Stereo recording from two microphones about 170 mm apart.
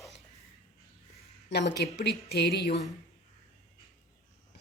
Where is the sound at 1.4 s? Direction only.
90° left.